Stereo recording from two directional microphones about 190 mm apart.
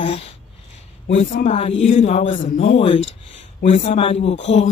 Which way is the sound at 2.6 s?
30° left (ahead or behind).